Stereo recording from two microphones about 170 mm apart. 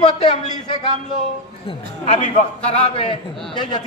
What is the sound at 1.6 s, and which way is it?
A man's voice, 40° left (ahead or behind).